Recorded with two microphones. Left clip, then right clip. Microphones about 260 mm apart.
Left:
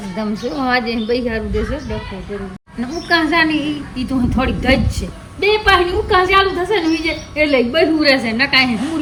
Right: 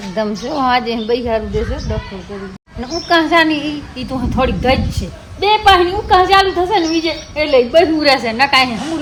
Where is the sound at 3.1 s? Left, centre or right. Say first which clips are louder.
Right 3 dB; centre.